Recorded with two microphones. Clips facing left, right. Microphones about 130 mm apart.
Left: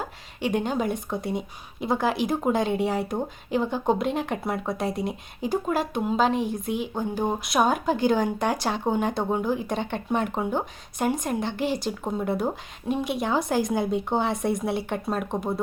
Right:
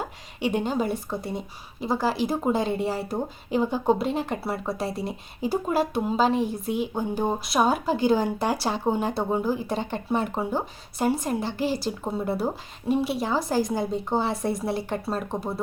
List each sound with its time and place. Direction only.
0.4 s a woman's voice: 5° right (ahead or behind)
6.2 s speech: 40° right (ahead or behind)
6.9 s a woman's voice: 10° right (ahead or behind)